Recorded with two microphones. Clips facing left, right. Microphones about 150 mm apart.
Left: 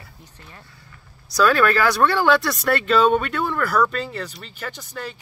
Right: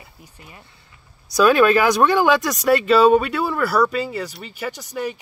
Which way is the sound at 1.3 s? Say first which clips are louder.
Right 4 dB; 15° right (ahead or behind).